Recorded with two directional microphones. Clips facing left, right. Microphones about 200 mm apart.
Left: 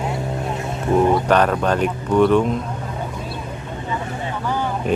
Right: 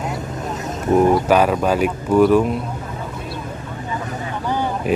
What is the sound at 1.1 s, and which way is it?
Speech, 5° right (ahead or behind).